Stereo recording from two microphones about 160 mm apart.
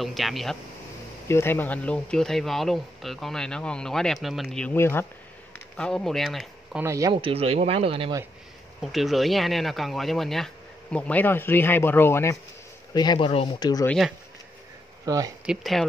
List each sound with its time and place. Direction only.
0.0 s speech: centre (ahead or behind)
1.3 s speech: 15° left (ahead or behind)
6.8 s speech: 20° right (ahead or behind)
7.2 s speech: 35° right (ahead or behind)
8.8 s speech: centre (ahead or behind); by 12.4 s 15° left (ahead or behind)
12.9 s speech: 25° left (ahead or behind)
13.8 s speech: centre (ahead or behind)
15.0 s speech: 20° right (ahead or behind)
15.4 s speech: centre (ahead or behind)